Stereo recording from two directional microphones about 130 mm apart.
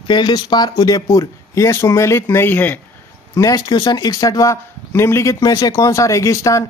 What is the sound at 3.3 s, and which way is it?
Speech, 25° left (ahead or behind).